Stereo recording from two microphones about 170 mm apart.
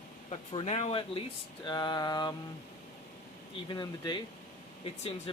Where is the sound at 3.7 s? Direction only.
25° left (ahead or behind).